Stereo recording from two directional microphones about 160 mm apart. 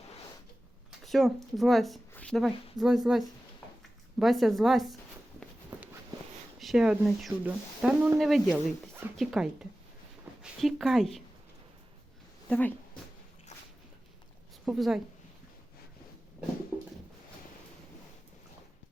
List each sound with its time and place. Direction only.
0.9 s speech: centre (ahead or behind)
2.1 s a sound: 5° left (ahead or behind)
2.7 s speech: centre (ahead or behind)
5.7 s walk: 15° right (ahead or behind)
6.6 s speech: centre (ahead or behind)
8.4 s speech: 15° right (ahead or behind)
9.1 s speech: 5° right (ahead or behind)
12.5 s speech: 10° left (ahead or behind)
14.6 s a woman's voice: 5° right (ahead or behind)